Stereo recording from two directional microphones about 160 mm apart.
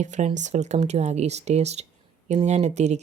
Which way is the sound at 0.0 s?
50° right (ahead or behind).